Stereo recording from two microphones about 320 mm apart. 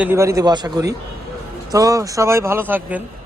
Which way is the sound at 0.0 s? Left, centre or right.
Centre.